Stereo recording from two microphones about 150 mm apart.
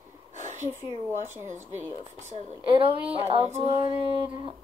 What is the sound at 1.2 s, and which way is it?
Speech, 50° right (ahead or behind).